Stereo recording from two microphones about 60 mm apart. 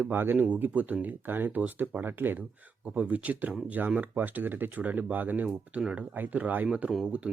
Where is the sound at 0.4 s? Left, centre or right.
Right.